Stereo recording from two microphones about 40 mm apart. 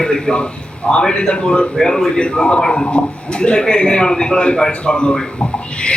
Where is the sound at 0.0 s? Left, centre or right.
Centre.